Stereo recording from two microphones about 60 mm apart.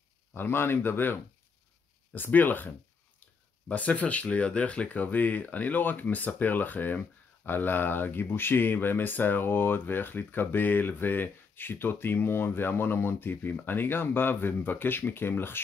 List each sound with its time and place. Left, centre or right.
0.3 s speech: left